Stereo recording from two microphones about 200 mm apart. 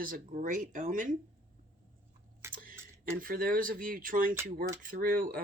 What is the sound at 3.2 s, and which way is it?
Speech, 45° right (ahead or behind).